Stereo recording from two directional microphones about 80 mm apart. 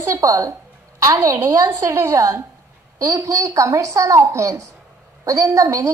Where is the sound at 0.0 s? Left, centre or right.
Right.